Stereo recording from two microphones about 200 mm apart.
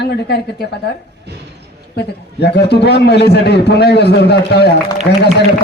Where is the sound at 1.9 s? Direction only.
55° left (ahead or behind).